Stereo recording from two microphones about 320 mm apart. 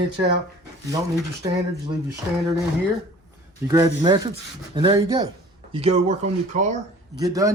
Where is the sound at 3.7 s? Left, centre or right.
Centre.